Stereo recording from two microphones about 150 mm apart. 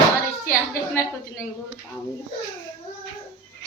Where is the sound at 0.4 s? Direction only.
20° left (ahead or behind).